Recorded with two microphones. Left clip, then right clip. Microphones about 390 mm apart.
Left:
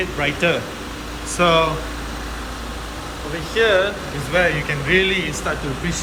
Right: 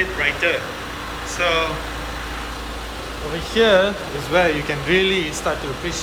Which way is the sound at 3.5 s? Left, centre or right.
Centre.